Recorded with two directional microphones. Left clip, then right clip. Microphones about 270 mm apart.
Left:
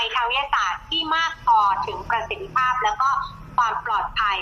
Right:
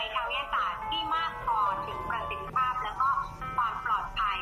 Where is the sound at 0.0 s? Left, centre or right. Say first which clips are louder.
Left 9 dB; centre.